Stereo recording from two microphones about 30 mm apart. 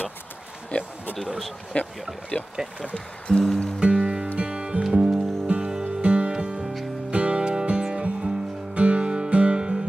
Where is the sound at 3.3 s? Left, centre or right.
Centre.